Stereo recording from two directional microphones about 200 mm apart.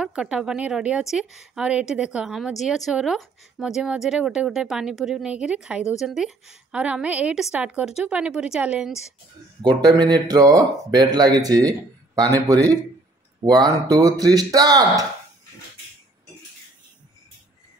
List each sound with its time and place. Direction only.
0.0 s a woman's voice: 5° right (ahead or behind)
9.6 s speech: 20° right (ahead or behind)